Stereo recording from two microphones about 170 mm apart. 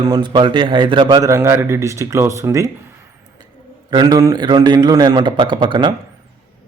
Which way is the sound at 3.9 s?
25° right (ahead or behind).